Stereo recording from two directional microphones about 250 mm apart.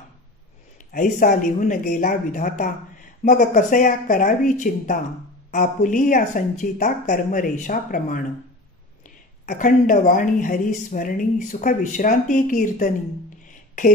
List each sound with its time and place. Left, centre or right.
0.9 s speech: left
9.5 s speech: left